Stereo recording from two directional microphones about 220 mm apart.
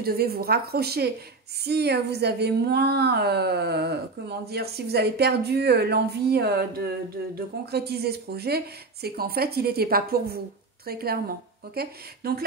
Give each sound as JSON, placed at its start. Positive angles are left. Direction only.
{"t": 0.0, "sound": "speech", "side_deg": -45}